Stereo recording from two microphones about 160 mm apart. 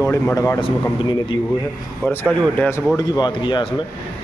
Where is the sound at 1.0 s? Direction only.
30° left (ahead or behind).